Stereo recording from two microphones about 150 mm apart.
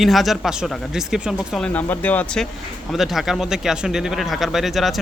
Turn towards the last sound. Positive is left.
turn(degrees=0)  # may be behind; listen again after turning